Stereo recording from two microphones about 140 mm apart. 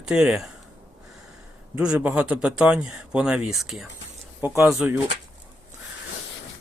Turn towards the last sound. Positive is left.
turn(degrees=-20)  # may be behind; listen again after turning